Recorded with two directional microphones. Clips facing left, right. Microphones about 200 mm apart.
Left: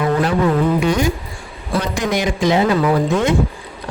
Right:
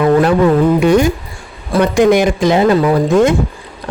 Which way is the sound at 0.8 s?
55° right (ahead or behind).